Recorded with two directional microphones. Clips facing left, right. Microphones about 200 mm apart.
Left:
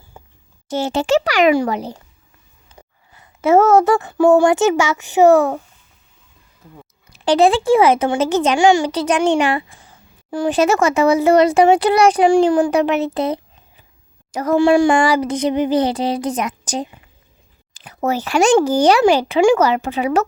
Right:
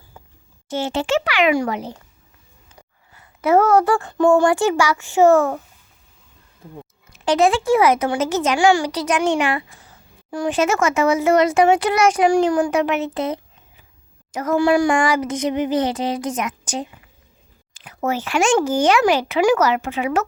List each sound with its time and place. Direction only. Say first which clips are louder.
0.1 s a sound: left 3 dB; 25° left (ahead or behind)
0.7 s speech: left 4 dB; 40° left (ahead or behind)
3.2 s speech: left 3 dB; 25° left (ahead or behind)
7.1 s speech: left 3 dB; 35° left (ahead or behind)